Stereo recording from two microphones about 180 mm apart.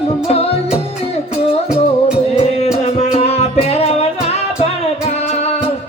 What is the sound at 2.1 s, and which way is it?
Music, 35° left (ahead or behind).